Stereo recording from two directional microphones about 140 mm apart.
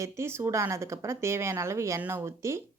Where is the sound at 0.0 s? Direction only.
20° right (ahead or behind).